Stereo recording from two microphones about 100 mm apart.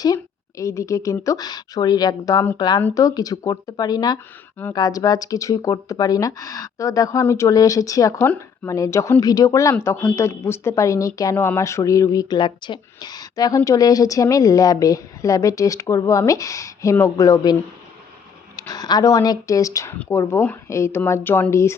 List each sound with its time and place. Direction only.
0.0 s a woman's voice: 35° left (ahead or behind)